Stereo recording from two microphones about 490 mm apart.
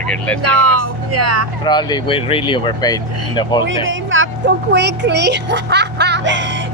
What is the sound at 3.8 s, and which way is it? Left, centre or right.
A woman's voice, right.